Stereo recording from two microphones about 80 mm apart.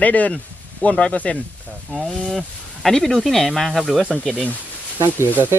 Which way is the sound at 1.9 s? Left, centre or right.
Centre.